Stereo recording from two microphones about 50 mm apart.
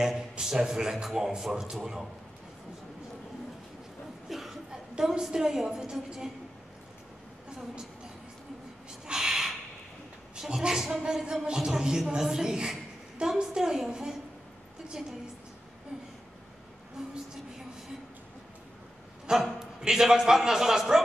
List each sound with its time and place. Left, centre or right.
0.0 s a man's voice: centre
4.3 s chuckle: centre
4.9 s a man's voice: centre
9.0 s a sound: centre
10.3 s a man's voice: centre
17.0 s a man's voice: centre
19.3 s a man's voice: centre